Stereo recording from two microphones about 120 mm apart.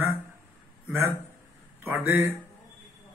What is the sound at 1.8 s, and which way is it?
Speech, 15° right (ahead or behind).